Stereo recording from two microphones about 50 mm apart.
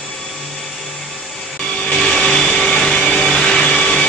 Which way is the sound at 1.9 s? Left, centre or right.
Centre.